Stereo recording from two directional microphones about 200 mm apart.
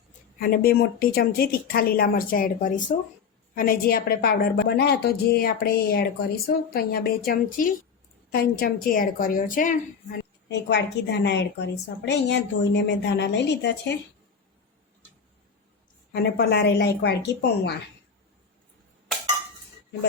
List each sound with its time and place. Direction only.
0.3 s speech: 45° left (ahead or behind)
10.5 s a woman's voice: 60° left (ahead or behind)
16.1 s a woman's voice: 55° left (ahead or behind)